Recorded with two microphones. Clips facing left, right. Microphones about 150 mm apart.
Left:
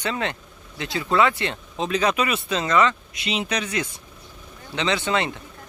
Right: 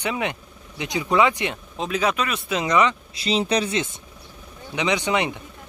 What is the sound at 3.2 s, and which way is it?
Speech, 35° right (ahead or behind).